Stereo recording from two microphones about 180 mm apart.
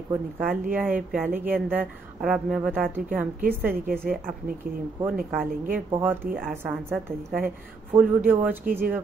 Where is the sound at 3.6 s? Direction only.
55° right (ahead or behind).